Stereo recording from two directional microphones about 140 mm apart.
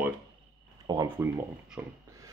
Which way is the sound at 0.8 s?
30° right (ahead or behind).